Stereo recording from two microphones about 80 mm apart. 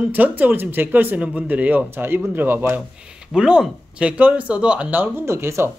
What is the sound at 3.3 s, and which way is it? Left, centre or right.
Speech, centre.